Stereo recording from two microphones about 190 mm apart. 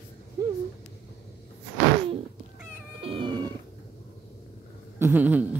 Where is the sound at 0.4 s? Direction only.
20° right (ahead or behind).